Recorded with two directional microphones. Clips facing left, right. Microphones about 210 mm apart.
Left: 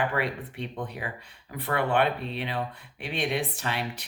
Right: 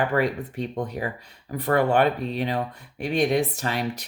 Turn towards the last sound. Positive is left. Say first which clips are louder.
# right 5 dB
turn(degrees=-40)  # may be behind; listen again after turning